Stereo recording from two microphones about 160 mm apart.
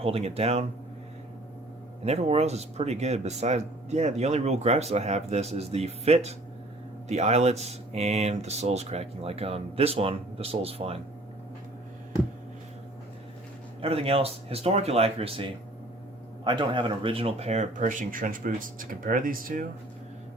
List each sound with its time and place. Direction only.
0.0 s speech: 40° right (ahead or behind)
2.0 s speech: 40° right (ahead or behind)
13.8 s speech: 35° right (ahead or behind); by 19.6 s 60° right (ahead or behind)